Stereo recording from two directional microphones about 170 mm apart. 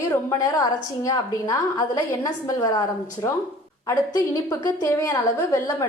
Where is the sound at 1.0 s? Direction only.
20° left (ahead or behind).